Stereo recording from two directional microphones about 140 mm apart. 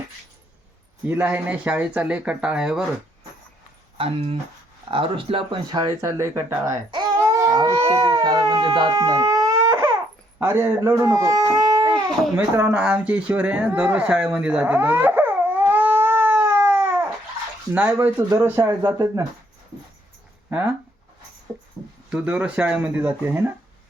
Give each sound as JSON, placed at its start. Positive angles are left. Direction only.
{"t": 1.0, "sound": "speech", "side_deg": -15}
{"t": 3.9, "sound": "speech", "side_deg": -45}
{"t": 12.4, "sound": "speech", "side_deg": -15}
{"t": 14.3, "sound": "dog", "side_deg": -10}
{"t": 17.7, "sound": "speech", "side_deg": -15}
{"t": 20.5, "sound": "speech", "side_deg": -10}
{"t": 22.1, "sound": "speech", "side_deg": -10}